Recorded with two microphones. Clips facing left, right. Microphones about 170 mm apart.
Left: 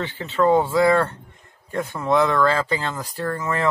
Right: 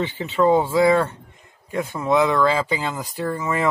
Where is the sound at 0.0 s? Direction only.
15° right (ahead or behind).